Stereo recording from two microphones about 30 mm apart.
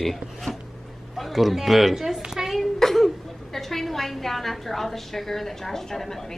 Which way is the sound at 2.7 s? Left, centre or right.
Centre.